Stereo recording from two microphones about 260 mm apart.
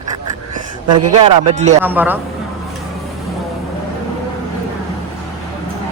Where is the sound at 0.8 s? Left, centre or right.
Right.